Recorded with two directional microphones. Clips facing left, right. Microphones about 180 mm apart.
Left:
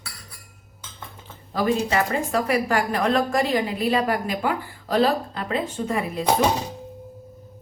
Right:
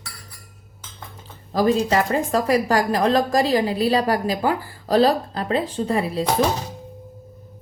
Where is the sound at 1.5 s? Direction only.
40° right (ahead or behind).